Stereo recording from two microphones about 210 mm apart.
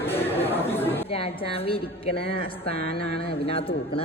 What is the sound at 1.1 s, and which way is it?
A woman's voice, 25° left (ahead or behind).